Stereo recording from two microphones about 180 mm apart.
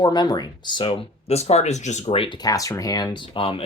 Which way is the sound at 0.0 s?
25° left (ahead or behind).